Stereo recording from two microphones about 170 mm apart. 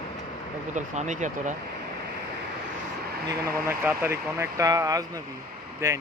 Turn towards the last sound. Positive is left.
turn(degrees=-20)  # may be behind; listen again after turning